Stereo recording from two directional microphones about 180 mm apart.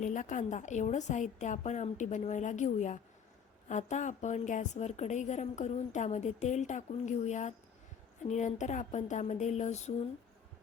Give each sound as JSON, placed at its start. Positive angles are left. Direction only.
{"t": 0.0, "sound": "a woman's voice", "side_deg": 45}